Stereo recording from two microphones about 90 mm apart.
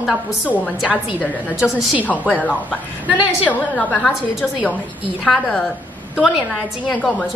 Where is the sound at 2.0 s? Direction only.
15° left (ahead or behind).